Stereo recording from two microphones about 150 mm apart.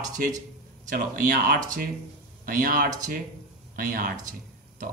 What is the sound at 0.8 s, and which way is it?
Speech, 65° right (ahead or behind).